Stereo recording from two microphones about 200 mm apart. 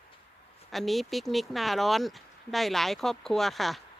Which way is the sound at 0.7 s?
Centre (ahead or behind).